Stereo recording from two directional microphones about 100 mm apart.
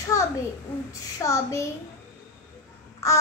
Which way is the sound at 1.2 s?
30° left (ahead or behind).